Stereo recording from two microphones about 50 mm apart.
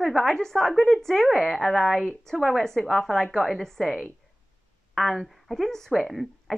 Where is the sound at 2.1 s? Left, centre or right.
Centre.